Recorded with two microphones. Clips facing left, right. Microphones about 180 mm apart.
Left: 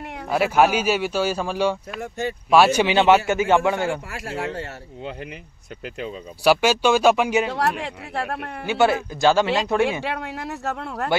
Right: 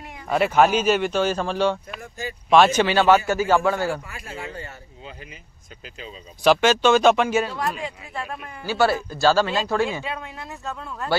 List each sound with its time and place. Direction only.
0.3 s a man's voice: 5° left (ahead or behind)
2.0 s speech: 65° left (ahead or behind)
2.5 s a man's voice: 10° left (ahead or behind)
4.1 s speech: 75° left (ahead or behind)
6.4 s a man's voice: 10° left (ahead or behind)
7.4 s speech: 75° left (ahead or behind)
8.6 s speech: 20° left (ahead or behind)
10.0 s speech: 75° left (ahead or behind)